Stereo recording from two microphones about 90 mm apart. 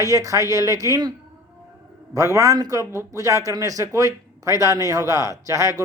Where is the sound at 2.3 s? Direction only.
40° right (ahead or behind).